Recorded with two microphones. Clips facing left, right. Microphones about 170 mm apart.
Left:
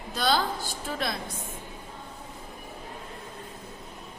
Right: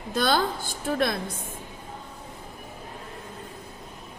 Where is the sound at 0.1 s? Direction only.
50° right (ahead or behind).